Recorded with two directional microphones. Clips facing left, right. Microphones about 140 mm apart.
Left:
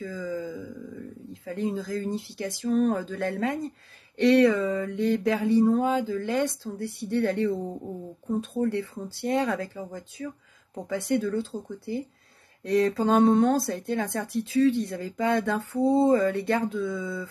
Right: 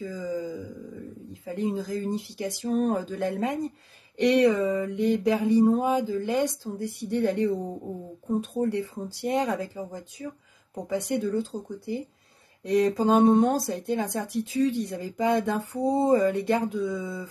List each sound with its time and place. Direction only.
0.0 s a sound: 20° right (ahead or behind)
1.4 s speech: 15° right (ahead or behind)
2.6 s speech: 30° right (ahead or behind)
2.9 s speech: 15° right (ahead or behind)